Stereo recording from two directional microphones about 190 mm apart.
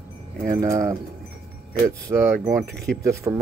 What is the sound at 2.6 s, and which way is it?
Speech, 55° right (ahead or behind).